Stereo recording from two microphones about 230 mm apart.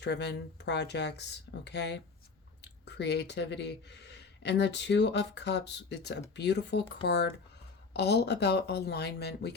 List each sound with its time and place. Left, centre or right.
0.0 s speech: left